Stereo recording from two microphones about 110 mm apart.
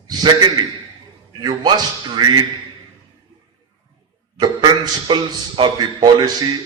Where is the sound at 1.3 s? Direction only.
40° right (ahead or behind).